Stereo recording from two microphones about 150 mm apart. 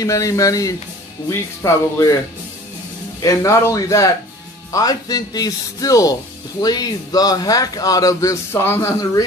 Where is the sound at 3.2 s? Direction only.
20° left (ahead or behind).